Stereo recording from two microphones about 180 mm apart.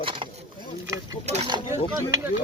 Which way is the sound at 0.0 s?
30° right (ahead or behind).